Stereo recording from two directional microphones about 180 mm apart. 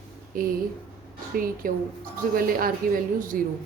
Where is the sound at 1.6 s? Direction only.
50° right (ahead or behind).